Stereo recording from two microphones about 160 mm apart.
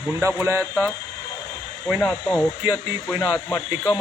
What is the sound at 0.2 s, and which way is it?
Speech, 15° right (ahead or behind).